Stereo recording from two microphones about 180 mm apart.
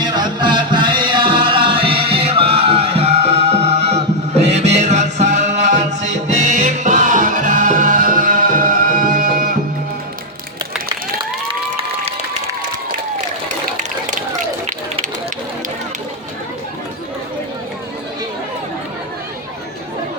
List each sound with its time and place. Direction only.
0.0 s music: 25° right (ahead or behind); by 9.6 s 50° right (ahead or behind)
14.7 s spray: 45° right (ahead or behind)